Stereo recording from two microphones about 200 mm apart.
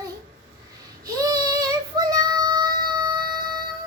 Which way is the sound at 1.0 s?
20° right (ahead or behind).